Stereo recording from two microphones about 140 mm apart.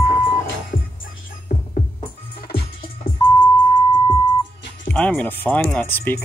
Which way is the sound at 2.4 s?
35° left (ahead or behind).